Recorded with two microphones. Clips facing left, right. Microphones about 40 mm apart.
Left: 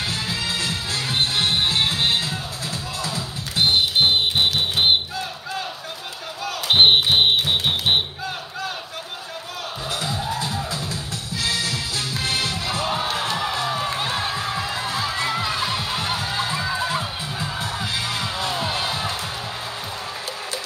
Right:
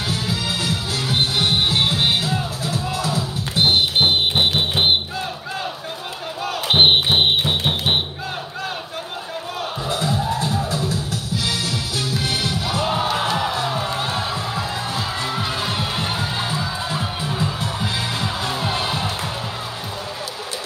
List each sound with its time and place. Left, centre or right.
0.7 s music: right
4.0 s music: centre
6.4 s music: centre
10.4 s music: right
12.4 s music: right
12.8 s music: centre
13.9 s music: centre
15.4 s music: centre
16.5 s music: centre
18.2 s music: centre